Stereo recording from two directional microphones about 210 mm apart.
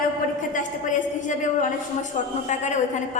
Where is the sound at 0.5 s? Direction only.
35° left (ahead or behind).